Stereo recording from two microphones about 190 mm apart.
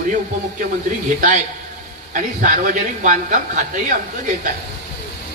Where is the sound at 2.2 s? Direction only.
45° right (ahead or behind).